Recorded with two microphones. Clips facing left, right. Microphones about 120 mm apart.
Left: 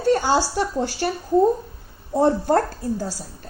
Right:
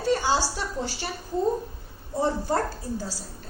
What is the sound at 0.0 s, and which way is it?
A woman's voice, 55° left (ahead or behind).